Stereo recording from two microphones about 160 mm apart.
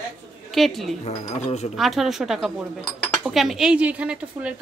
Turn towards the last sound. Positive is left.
turn(degrees=-10)  # may be behind; listen again after turning